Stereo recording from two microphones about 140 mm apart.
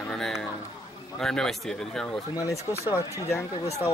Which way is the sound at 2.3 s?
25° left (ahead or behind).